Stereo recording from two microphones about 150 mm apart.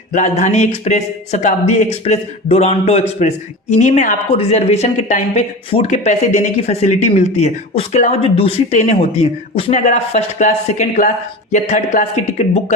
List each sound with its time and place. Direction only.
0.1 s speech: 55° left (ahead or behind)